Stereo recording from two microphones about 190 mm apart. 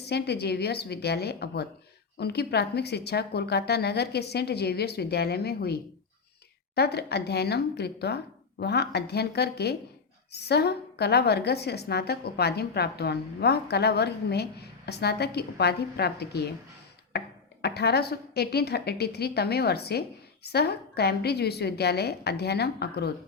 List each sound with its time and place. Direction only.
0.0 s a woman's voice: 60° left (ahead or behind)